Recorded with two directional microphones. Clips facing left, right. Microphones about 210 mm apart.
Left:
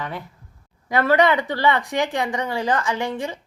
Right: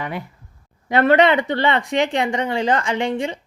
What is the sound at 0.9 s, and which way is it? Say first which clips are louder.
A woman's voice: right 3 dB; 25° right (ahead or behind).